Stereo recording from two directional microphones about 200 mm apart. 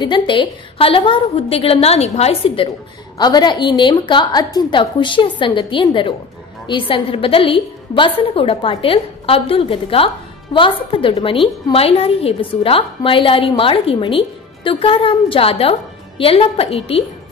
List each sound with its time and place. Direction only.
0.0 s a woman's voice: 25° left (ahead or behind)